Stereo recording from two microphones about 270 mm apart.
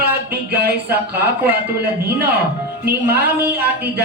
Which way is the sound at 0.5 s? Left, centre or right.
Right.